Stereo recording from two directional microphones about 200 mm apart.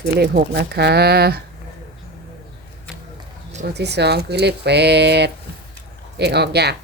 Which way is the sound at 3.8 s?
55° right (ahead or behind).